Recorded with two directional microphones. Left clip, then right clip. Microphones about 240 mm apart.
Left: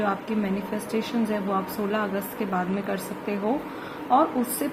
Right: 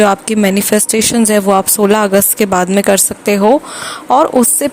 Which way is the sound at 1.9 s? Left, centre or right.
Right.